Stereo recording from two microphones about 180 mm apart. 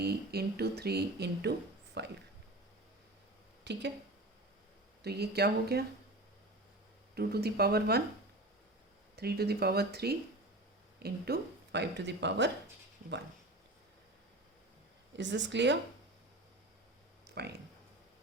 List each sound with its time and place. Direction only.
0.0 s speech: 60° right (ahead or behind)
3.6 s speech: 70° right (ahead or behind)
5.0 s speech: 65° right (ahead or behind)
7.2 s speech: 60° right (ahead or behind)
9.1 s speech: 60° right (ahead or behind)
15.1 s speech: 80° right
17.2 s a sound: 65° right (ahead or behind)